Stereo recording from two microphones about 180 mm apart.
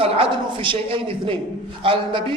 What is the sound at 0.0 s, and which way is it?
A man's voice, 30° right (ahead or behind).